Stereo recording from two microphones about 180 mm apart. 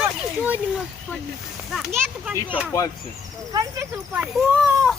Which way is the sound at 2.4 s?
10° right (ahead or behind).